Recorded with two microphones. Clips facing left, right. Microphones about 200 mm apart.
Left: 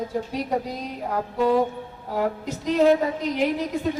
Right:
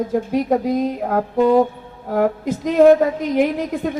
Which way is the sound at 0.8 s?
55° right (ahead or behind).